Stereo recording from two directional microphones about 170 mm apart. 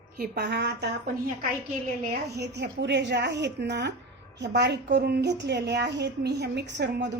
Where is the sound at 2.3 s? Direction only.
80° right.